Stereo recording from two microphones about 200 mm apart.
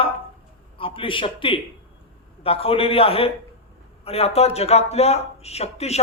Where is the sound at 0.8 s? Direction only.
25° left (ahead or behind).